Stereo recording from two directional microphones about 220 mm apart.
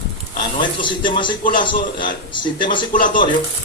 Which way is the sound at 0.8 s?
20° left (ahead or behind).